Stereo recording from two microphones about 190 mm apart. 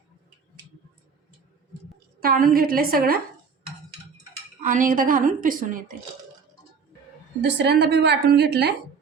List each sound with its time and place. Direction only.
2.2 s a woman's voice: 50° right (ahead or behind)
4.6 s a woman's voice: 45° right (ahead or behind)
7.4 s a woman's voice: 65° right (ahead or behind)